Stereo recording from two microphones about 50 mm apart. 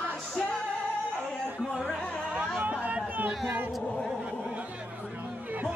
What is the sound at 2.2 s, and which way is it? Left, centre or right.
Music, right.